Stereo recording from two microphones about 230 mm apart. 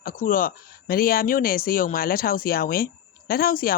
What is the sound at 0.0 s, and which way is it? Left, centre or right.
Speech, left.